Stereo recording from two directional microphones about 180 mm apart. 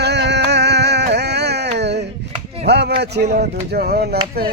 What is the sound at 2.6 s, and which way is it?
Speech, 70° right (ahead or behind).